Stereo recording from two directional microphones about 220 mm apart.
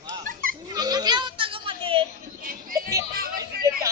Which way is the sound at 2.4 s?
40° right (ahead or behind).